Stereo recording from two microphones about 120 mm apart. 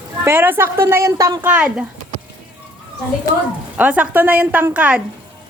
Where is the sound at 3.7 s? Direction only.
15° right (ahead or behind).